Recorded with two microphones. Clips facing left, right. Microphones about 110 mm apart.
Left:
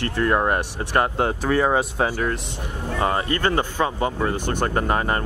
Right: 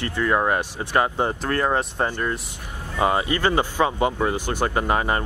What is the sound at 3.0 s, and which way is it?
Speech, 15° right (ahead or behind).